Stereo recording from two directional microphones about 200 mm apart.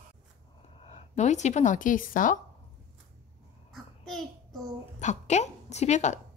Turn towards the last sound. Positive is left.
turn(degrees=35)  # may be behind; listen again after turning